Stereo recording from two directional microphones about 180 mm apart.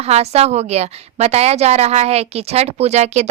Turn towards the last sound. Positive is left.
turn(degrees=-40)  # may be behind; listen again after turning